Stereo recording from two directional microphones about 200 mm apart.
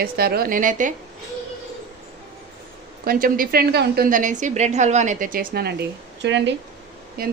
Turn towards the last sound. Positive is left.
turn(degrees=-50)  # may be behind; listen again after turning